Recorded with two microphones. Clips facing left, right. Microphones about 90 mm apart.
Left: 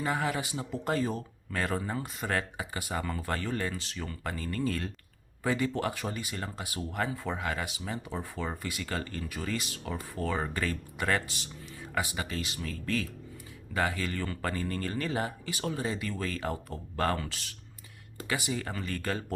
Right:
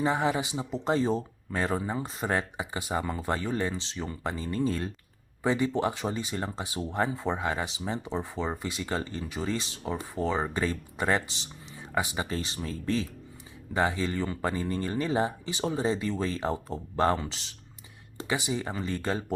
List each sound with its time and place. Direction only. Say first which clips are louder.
0.0 s speech: right 4 dB; 25° right (ahead or behind)